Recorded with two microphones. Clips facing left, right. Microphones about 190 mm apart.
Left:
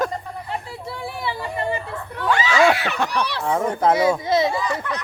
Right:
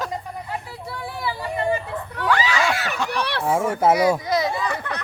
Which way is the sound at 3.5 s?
5° right (ahead or behind).